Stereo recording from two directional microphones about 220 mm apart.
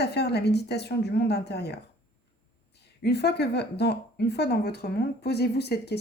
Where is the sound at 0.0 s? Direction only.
50° left (ahead or behind).